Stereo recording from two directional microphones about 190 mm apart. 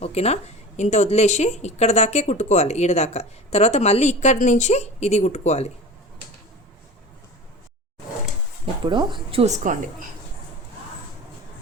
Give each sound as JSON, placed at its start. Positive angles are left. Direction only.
{"t": 0.0, "sound": "speech", "side_deg": 35}
{"t": 8.8, "sound": "speech", "side_deg": -25}